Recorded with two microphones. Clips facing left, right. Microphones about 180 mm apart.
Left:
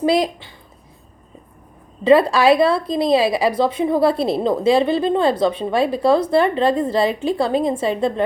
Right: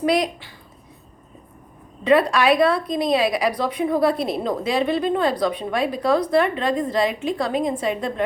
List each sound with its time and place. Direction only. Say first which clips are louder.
0.0 s a woman's voice: left 3 dB; 30° left (ahead or behind)
2.0 s a woman's voice: left 4 dB; 30° left (ahead or behind)